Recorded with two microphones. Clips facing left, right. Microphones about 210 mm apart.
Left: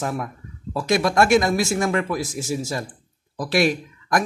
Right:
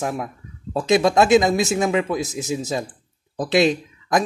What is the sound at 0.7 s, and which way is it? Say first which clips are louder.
A man's voice: right 3 dB; 20° right (ahead or behind).